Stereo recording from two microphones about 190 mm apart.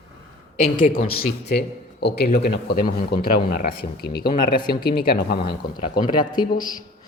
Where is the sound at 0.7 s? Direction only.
45° left (ahead or behind).